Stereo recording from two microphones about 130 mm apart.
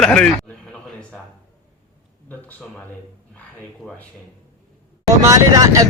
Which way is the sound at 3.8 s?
5° left (ahead or behind).